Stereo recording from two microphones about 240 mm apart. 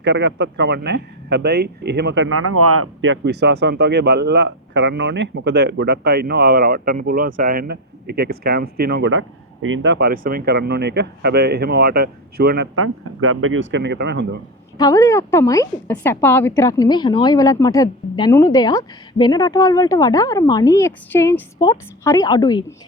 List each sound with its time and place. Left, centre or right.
0.0 s speech: right
12.7 s speech: right
14.8 s a woman's voice: centre